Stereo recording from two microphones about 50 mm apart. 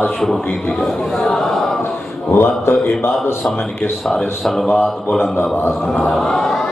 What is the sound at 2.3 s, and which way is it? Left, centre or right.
Speech, left.